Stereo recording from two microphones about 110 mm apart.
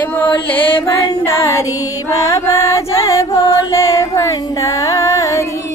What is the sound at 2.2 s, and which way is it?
Music, 30° left (ahead or behind).